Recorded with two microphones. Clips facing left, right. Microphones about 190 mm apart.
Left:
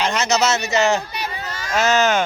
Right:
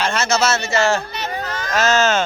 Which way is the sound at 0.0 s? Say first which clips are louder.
Even; 15° left (ahead or behind).